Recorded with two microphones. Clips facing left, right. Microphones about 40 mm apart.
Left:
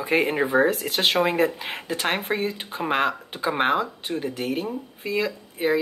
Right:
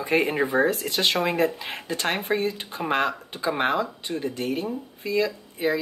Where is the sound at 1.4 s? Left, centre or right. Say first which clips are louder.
Left 1 dB; left.